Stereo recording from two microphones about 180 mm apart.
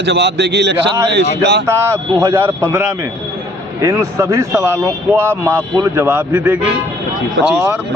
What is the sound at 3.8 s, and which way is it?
Speech, 15° right (ahead or behind).